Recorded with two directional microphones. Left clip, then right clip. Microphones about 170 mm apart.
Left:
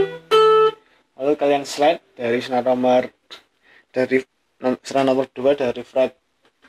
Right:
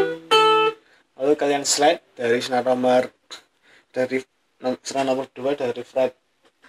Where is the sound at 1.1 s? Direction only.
Centre (ahead or behind).